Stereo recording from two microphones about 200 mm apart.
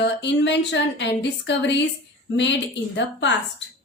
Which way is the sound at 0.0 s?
60° left (ahead or behind).